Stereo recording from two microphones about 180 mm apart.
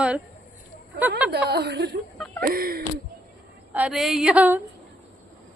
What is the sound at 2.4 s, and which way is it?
Speech, 55° right (ahead or behind).